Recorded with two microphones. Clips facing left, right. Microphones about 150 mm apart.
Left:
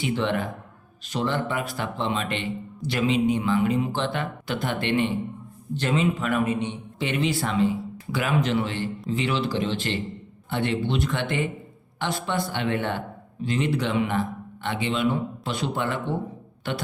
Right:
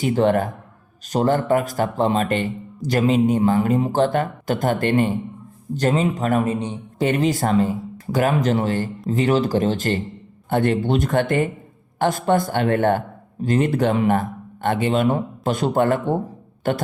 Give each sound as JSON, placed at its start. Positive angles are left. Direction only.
{"t": 0.0, "sound": "speech", "side_deg": -45}